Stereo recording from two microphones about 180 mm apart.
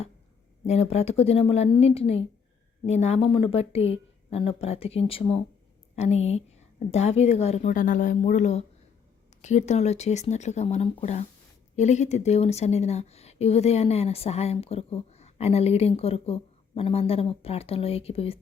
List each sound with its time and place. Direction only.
0.7 s speech: 35° left (ahead or behind)